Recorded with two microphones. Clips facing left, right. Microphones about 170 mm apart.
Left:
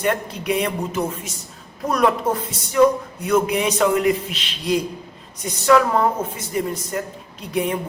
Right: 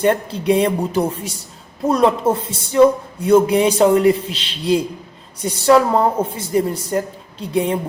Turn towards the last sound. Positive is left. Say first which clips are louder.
# right 4 dB
turn(degrees=-30)  # may be behind; listen again after turning